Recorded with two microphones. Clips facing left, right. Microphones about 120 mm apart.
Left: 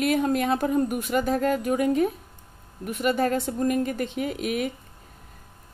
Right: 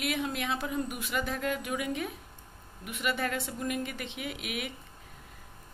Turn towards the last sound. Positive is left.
turn(degrees=40)  # may be behind; listen again after turning